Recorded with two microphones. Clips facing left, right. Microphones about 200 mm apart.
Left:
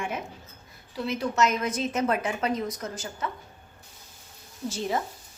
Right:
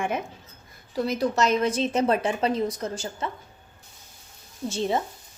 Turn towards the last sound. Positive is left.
turn(degrees=-25)  # may be behind; listen again after turning